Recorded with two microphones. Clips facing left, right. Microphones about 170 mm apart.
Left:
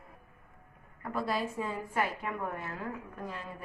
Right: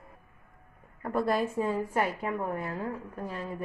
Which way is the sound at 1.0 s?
50° right (ahead or behind).